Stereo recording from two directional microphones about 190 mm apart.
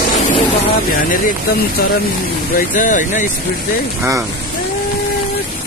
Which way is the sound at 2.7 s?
40° left (ahead or behind).